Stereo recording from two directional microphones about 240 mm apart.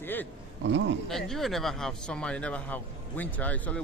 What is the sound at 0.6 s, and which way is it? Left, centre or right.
Speech, right.